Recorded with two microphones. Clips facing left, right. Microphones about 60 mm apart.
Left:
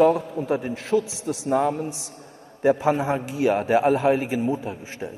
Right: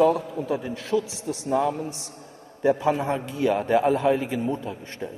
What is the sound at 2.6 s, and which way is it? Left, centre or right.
Speech, left.